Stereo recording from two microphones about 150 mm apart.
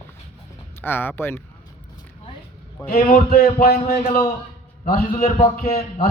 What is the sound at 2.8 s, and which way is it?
A man's voice, 80° left.